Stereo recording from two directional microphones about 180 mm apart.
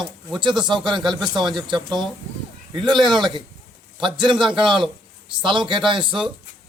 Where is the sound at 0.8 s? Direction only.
25° right (ahead or behind).